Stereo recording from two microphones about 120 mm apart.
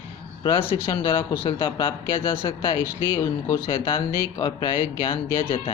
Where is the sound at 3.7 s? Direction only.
45° left (ahead or behind).